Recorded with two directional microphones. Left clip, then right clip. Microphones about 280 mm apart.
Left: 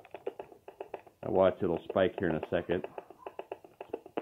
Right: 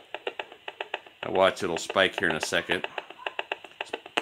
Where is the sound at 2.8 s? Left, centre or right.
Right.